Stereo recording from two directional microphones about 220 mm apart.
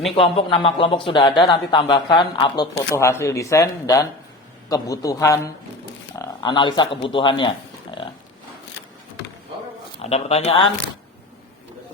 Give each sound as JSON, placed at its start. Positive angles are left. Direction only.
{"t": 0.2, "sound": "speech", "side_deg": 25}
{"t": 10.0, "sound": "speech", "side_deg": 30}